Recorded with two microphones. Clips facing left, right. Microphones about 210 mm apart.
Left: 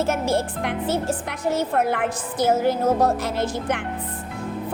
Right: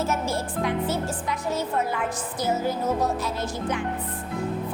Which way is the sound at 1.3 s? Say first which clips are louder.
Left 3 dB; 65° left (ahead or behind).